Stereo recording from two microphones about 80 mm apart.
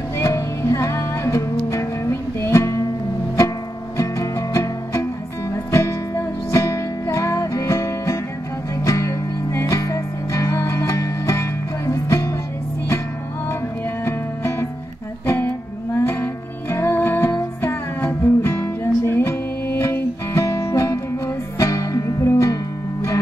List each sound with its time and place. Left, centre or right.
0.2 s music: left
14.0 s music: left
15.9 s music: left